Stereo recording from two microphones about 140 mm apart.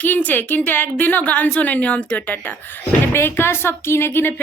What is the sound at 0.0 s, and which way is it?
A woman's voice, 10° left (ahead or behind).